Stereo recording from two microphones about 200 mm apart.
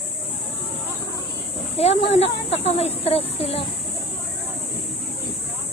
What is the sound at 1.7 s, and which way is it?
Speech, 30° left (ahead or behind).